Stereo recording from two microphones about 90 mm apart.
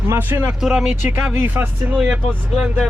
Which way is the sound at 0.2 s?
25° right (ahead or behind).